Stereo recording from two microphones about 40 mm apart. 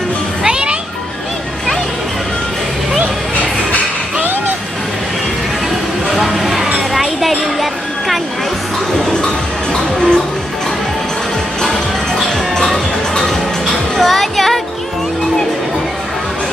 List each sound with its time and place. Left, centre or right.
0.5 s music: right
6.0 s a sound: centre
8.9 s music: centre
12.7 s music: centre